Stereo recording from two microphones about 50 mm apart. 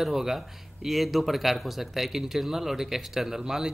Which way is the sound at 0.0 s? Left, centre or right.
Centre.